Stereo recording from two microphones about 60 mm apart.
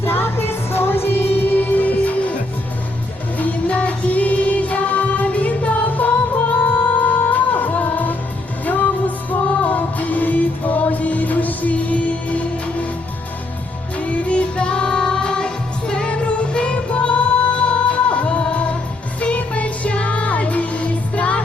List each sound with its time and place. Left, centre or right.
0.0 s music: left
3.3 s music: left
13.9 s music: left